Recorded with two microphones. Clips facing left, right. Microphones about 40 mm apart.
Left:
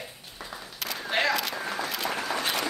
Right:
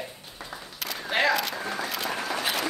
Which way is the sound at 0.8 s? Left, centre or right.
Centre.